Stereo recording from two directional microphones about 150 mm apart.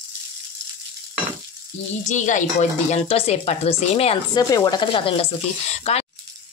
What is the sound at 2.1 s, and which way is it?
Speech, 55° left (ahead or behind).